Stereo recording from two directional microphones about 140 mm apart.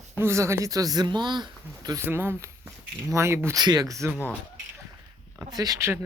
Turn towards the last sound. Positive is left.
turn(degrees=-20)  # may be behind; listen again after turning